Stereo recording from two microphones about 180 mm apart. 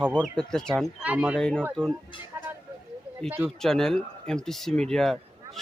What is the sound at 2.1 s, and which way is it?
Speech, 25° left (ahead or behind).